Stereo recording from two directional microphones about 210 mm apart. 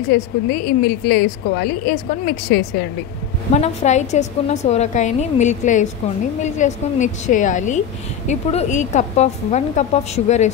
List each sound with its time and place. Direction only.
0.1 s a woman's voice: 45° left (ahead or behind)
3.5 s a woman's voice: 35° left (ahead or behind)